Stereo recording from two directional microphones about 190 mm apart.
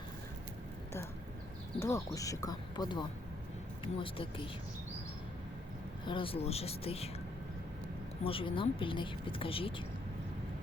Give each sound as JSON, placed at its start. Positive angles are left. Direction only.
{"t": 1.8, "sound": "speech", "side_deg": 15}
{"t": 6.1, "sound": "speech", "side_deg": 30}
{"t": 8.2, "sound": "speech", "side_deg": 30}